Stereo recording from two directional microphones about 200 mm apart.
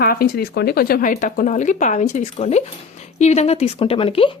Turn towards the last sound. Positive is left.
turn(degrees=30)  # may be behind; listen again after turning